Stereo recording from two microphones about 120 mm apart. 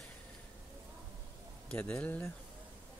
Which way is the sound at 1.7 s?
10° left (ahead or behind).